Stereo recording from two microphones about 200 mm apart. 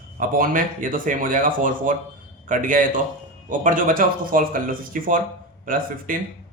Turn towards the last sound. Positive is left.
turn(degrees=-45)  # may be behind; listen again after turning